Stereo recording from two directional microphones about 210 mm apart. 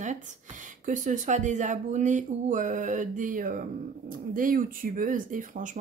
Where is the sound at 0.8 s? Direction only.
35° right (ahead or behind).